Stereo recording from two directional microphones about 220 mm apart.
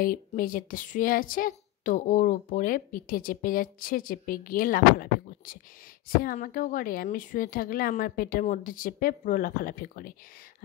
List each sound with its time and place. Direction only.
0.0 s a woman's voice: 40° left (ahead or behind)